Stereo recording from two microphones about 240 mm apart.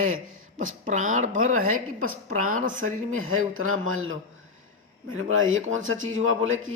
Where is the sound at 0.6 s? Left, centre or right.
Right.